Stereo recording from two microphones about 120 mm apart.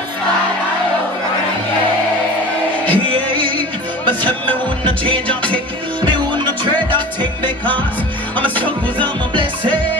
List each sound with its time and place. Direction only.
2.9 s music: 45° right (ahead or behind)